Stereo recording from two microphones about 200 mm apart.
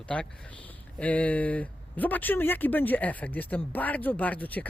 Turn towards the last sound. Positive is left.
turn(degrees=10)  # may be behind; listen again after turning